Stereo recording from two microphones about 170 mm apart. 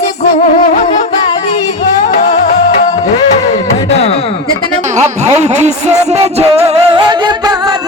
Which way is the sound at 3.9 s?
35° left (ahead or behind).